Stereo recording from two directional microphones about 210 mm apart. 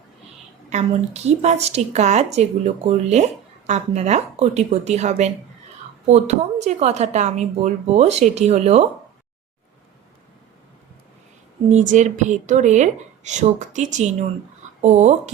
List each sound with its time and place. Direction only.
0.7 s speech: 30° right (ahead or behind)
11.7 s speech: 35° right (ahead or behind)